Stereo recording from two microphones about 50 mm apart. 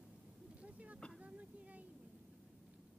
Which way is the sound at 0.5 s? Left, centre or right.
Right.